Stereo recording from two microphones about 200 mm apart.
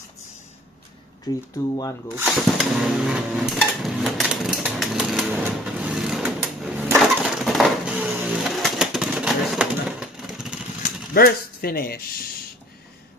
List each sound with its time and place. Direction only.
1.7 s speech: 20° left (ahead or behind)
2.1 s a sound: centre (ahead or behind)
11.1 s speech: 50° left (ahead or behind)